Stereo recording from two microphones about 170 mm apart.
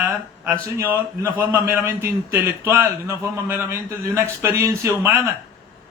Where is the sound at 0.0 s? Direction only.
10° right (ahead or behind).